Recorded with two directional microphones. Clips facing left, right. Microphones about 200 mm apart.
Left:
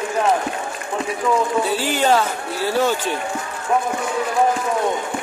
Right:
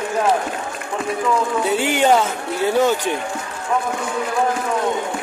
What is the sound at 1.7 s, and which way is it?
A man's voice, 20° right (ahead or behind).